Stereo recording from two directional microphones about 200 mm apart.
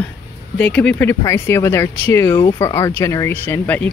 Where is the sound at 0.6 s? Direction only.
5° left (ahead or behind).